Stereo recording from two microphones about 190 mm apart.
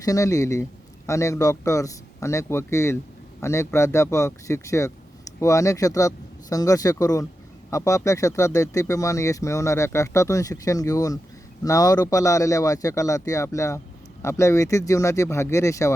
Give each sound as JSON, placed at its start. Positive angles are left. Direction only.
{"t": 0.0, "sound": "speech", "side_deg": 15}